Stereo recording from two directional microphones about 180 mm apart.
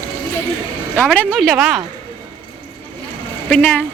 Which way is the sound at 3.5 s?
5° left (ahead or behind).